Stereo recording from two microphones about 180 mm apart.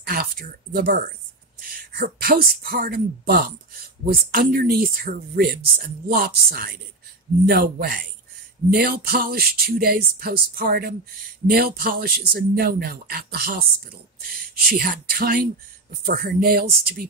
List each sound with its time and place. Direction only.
0.0 s speech: 55° right (ahead or behind)
14.7 s speech: 55° right (ahead or behind)